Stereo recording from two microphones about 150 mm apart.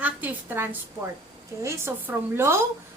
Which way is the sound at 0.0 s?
10° right (ahead or behind).